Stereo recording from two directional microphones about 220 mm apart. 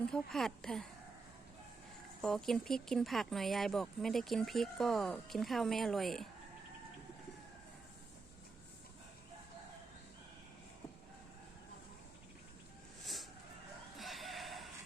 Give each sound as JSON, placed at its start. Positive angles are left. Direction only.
{"t": 0.0, "sound": "speech", "side_deg": 5}
{"t": 2.2, "sound": "speech", "side_deg": 0}
{"t": 14.0, "sound": "a sound", "side_deg": 0}